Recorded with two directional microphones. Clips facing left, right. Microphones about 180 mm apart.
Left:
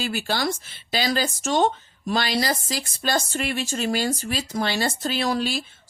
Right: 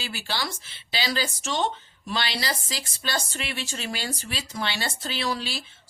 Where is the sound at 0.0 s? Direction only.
50° left (ahead or behind).